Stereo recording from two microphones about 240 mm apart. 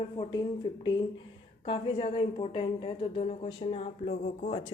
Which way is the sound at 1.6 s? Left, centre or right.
Left.